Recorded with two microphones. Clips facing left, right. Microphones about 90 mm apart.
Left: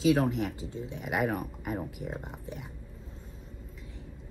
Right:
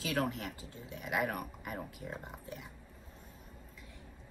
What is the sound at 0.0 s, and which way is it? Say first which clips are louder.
A woman's voice: left 9 dB; 20° left (ahead or behind).